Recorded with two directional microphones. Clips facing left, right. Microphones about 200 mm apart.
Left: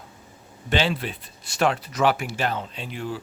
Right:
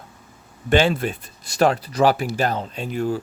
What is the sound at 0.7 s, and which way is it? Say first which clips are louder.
Speech: right 6 dB; 50° right (ahead or behind).